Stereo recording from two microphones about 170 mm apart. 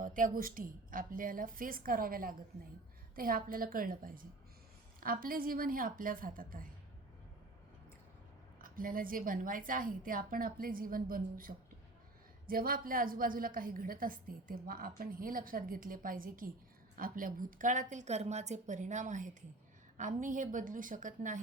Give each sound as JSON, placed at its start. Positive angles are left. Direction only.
{"t": 0.0, "sound": "a woman's voice", "side_deg": -55}
{"t": 8.6, "sound": "a woman's voice", "side_deg": -55}